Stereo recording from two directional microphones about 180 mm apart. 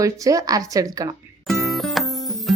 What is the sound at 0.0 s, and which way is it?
Speech, 20° right (ahead or behind).